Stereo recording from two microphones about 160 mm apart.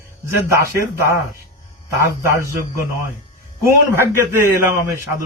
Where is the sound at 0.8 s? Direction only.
15° right (ahead or behind).